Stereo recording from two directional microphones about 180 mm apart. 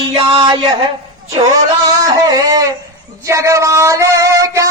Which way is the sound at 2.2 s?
20° right (ahead or behind).